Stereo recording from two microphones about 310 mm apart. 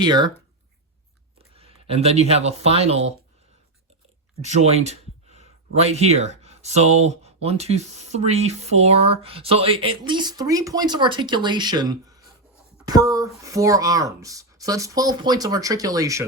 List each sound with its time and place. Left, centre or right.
0.0 s speech: centre
1.5 s speech: centre
4.4 s speech: right